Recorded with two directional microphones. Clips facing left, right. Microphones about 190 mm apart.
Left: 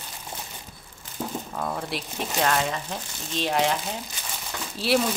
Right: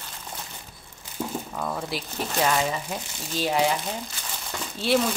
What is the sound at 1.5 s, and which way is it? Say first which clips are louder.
Speech: even; centre (ahead or behind).